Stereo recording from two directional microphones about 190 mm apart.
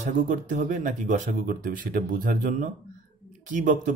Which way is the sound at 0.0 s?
40° right (ahead or behind).